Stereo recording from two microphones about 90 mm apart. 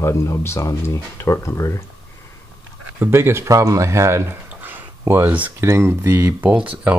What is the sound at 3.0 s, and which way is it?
A man's voice, 25° right (ahead or behind).